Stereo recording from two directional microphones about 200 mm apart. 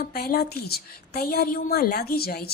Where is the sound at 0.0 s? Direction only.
50° left (ahead or behind).